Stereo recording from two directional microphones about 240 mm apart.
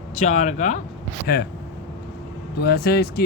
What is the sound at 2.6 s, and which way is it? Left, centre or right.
Speech, left.